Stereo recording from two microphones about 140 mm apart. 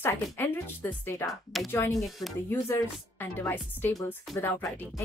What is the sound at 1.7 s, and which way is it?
Speech, 20° left (ahead or behind).